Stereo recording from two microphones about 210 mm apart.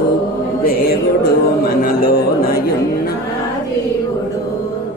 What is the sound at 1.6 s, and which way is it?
Music, 45° left (ahead or behind).